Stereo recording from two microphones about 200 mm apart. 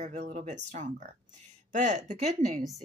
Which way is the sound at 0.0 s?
35° right (ahead or behind).